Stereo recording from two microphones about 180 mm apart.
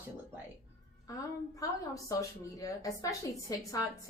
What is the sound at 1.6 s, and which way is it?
Speech, 20° left (ahead or behind).